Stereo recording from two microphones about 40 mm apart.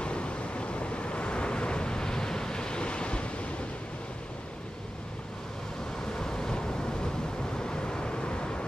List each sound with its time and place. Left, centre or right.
0.0 s waves: left
6.1 s waves: centre
7.5 s vehicle: left